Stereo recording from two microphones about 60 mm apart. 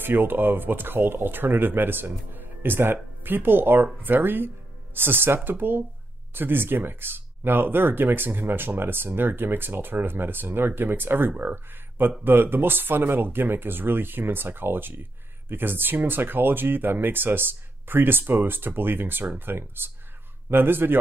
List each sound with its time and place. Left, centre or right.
0.0 s speech: right